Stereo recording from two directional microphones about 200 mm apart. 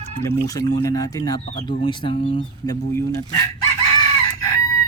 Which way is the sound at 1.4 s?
35° left (ahead or behind).